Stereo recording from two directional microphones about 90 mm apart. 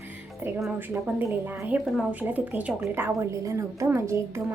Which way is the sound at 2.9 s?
30° right (ahead or behind).